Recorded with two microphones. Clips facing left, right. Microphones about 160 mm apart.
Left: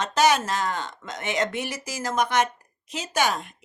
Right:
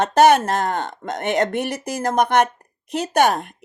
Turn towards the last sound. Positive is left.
turn(degrees=-55)  # may be behind; listen again after turning